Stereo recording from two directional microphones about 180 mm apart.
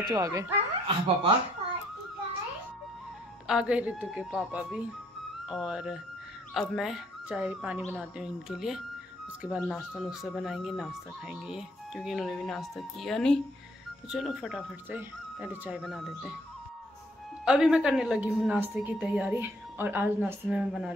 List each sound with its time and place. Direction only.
0.0 s speech: 20° right (ahead or behind)
0.8 s speech: 30° right (ahead or behind)
3.4 s speech: 5° right (ahead or behind)
17.5 s speech: 5° right (ahead or behind)